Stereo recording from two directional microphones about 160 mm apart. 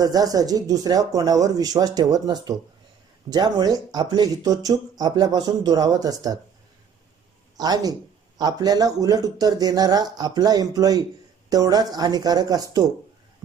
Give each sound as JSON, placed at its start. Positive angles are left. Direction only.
{"t": 0.0, "sound": "speech", "side_deg": -20}
{"t": 7.5, "sound": "speech", "side_deg": -25}